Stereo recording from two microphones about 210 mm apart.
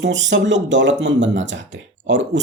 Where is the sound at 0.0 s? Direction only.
60° right (ahead or behind).